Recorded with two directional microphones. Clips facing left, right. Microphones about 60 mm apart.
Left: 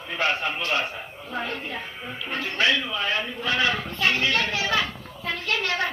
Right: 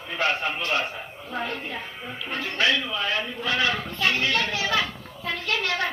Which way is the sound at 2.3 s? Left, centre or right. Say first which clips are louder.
Left 1 dB; left.